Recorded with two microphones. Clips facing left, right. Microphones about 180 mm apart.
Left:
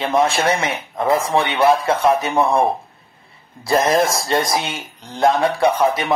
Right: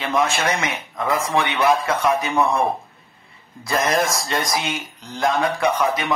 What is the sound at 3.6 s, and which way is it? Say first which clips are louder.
Speech: left 4 dB; 30° left (ahead or behind).